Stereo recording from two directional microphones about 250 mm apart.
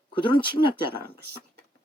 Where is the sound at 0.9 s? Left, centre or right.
Right.